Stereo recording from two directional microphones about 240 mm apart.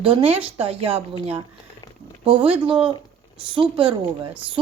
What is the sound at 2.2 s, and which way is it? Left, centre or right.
Speech, right.